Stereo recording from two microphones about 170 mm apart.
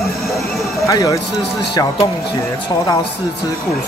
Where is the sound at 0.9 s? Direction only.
20° left (ahead or behind).